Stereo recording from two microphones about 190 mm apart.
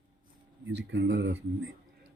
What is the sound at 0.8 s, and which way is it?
Speech, 65° right (ahead or behind).